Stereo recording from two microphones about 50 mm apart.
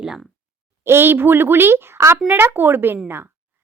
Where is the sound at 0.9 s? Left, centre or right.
Right.